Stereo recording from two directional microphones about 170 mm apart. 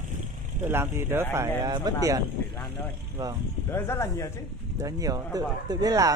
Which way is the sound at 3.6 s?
15° left (ahead or behind).